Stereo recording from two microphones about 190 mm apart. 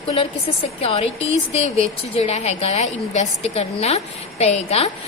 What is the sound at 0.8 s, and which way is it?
A woman's voice, 30° left (ahead or behind).